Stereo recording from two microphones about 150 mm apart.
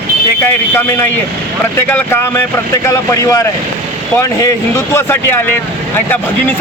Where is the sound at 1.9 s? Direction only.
15° left (ahead or behind).